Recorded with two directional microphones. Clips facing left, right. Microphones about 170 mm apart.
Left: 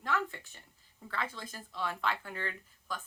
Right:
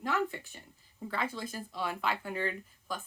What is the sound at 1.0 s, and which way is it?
Speech, 15° right (ahead or behind).